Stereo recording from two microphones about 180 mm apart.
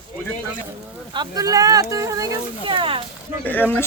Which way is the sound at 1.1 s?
25° right (ahead or behind).